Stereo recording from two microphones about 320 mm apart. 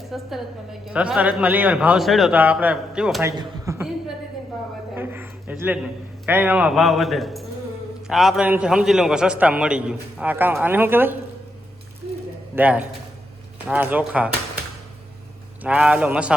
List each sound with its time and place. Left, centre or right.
0.1 s a woman's voice: centre
4.9 s a sound: centre
6.2 s a woman's voice: centre
12.5 s a woman's voice: centre
15.6 s a woman's voice: centre